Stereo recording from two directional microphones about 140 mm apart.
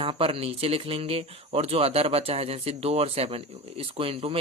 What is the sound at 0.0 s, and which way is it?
Speech, 40° right (ahead or behind).